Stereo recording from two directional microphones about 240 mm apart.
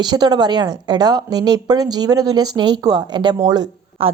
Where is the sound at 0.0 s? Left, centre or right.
Centre.